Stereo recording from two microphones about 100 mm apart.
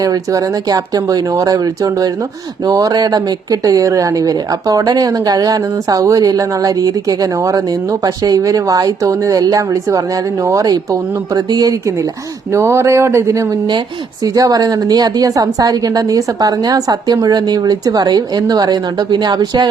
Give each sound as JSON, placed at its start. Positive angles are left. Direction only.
{"t": 0.0, "sound": "a woman's voice", "side_deg": -35}
{"t": 12.5, "sound": "a sound", "side_deg": -30}
{"t": 14.3, "sound": "a woman's voice", "side_deg": -40}